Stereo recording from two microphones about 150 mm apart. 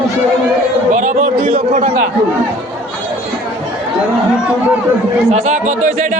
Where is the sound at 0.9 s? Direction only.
55° right (ahead or behind).